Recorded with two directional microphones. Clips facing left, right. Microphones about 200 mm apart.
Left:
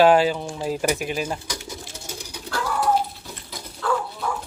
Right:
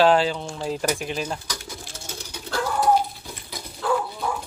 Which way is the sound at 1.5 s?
20° left (ahead or behind).